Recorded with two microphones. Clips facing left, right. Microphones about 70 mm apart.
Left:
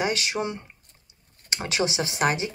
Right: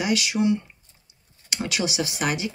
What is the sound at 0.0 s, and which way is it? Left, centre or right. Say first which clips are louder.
Speech: right 3 dB; left.